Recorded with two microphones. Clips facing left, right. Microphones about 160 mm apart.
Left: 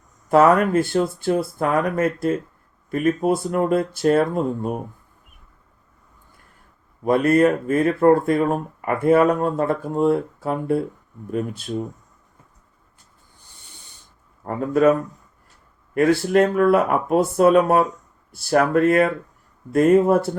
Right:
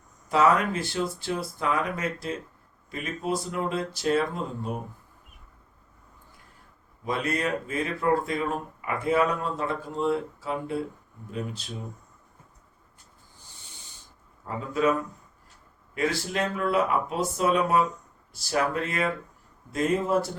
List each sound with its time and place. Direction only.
0.3 s speech: 55° left (ahead or behind)
7.0 s speech: 55° left (ahead or behind)
14.4 s speech: 55° left (ahead or behind)
16.0 s speech: 55° left (ahead or behind)